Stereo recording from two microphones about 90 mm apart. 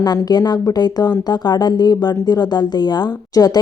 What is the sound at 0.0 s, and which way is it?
A woman's voice, 50° left (ahead or behind).